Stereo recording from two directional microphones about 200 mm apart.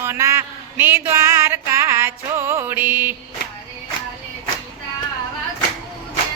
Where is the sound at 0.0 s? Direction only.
15° right (ahead or behind).